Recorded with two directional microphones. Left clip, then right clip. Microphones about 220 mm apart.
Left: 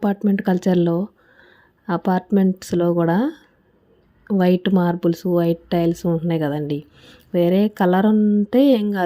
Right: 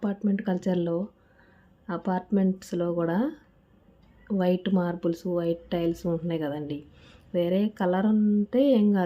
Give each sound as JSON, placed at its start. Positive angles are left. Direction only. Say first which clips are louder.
{"t": 0.0, "sound": "speech", "louder": "left 9 dB", "side_deg": 35}